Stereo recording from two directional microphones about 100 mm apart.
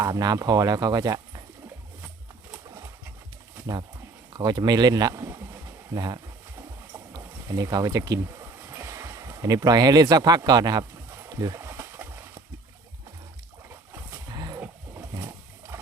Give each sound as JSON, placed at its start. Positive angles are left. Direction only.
{"t": 0.0, "sound": "speech", "side_deg": -40}
{"t": 4.4, "sound": "speech", "side_deg": -45}
{"t": 7.2, "sound": "speech", "side_deg": -35}
{"t": 11.6, "sound": "splash", "side_deg": -25}
{"t": 14.3, "sound": "a sound", "side_deg": -40}
{"t": 15.1, "sound": "roaring cats", "side_deg": -30}